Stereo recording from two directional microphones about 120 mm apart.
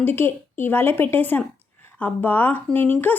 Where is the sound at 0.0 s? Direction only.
20° left (ahead or behind).